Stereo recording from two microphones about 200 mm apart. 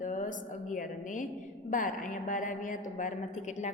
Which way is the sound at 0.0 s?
40° left (ahead or behind).